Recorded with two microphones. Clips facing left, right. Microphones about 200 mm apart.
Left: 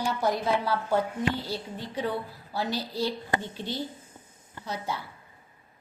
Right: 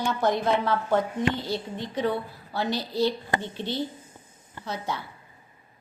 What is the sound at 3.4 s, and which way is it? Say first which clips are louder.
A woman's voice: right 3 dB; 10° left (ahead or behind).